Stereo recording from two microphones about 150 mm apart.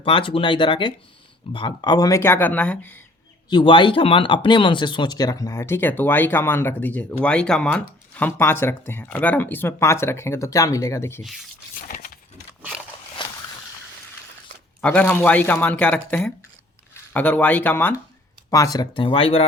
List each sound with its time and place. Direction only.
0.0 s speech: 35° left (ahead or behind); by 3.0 s 10° left (ahead or behind)
3.5 s speech: 35° left (ahead or behind); by 11.2 s 20° left (ahead or behind)
11.9 s a sound: 70° left (ahead or behind)
14.8 s speech: 5° left (ahead or behind)
18.5 s speech: 25° left (ahead or behind)